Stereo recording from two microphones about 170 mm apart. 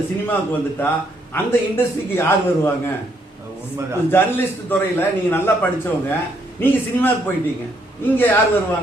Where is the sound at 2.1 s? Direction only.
15° left (ahead or behind).